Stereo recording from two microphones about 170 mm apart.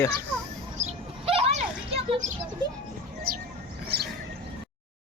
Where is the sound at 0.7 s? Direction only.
35° right (ahead or behind).